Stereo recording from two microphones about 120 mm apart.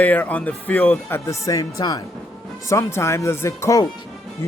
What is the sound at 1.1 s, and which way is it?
Speech, 25° left (ahead or behind).